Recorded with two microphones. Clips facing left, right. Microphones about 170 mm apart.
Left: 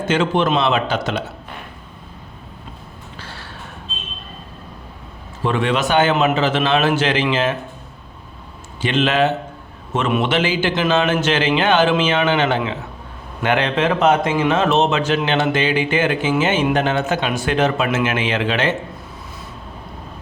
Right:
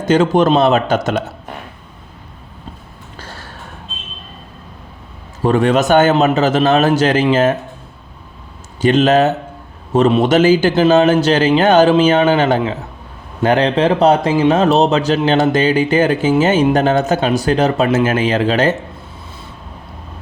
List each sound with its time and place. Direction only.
0.0 s a man's voice: 40° right (ahead or behind)
3.2 s a sound: 45° right (ahead or behind)
5.4 s speech: 40° right (ahead or behind)
8.8 s speech: 40° right (ahead or behind)